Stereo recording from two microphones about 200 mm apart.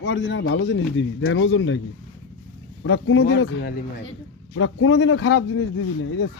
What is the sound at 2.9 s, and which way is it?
Speech, 70° left (ahead or behind).